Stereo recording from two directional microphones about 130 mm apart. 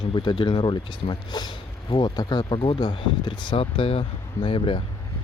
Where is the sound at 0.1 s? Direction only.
40° left (ahead or behind).